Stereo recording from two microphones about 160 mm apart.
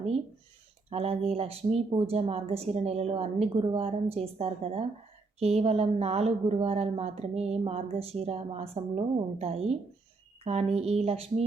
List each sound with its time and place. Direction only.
0.9 s speech: 40° right (ahead or behind)